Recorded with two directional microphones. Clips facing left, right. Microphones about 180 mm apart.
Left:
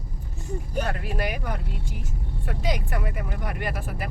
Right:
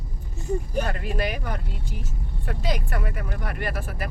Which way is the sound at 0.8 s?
5° left (ahead or behind).